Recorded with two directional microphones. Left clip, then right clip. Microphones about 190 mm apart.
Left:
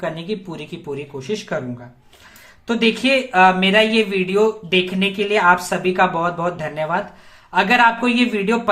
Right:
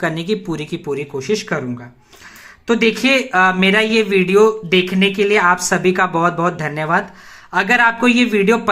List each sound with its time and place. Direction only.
0.0 s a man's voice: 25° right (ahead or behind)
2.6 s a man's voice: 20° right (ahead or behind)